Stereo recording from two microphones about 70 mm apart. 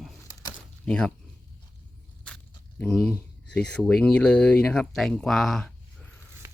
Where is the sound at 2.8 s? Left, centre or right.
Centre.